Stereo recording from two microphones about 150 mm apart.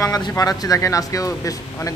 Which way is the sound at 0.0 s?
20° left (ahead or behind).